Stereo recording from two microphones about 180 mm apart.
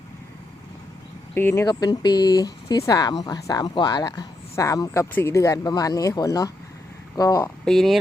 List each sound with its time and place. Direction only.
1.3 s speech: 15° left (ahead or behind)
7.6 s speech: centre (ahead or behind)